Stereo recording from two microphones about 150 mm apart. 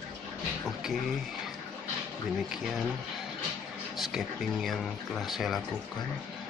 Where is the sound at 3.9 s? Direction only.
Centre (ahead or behind).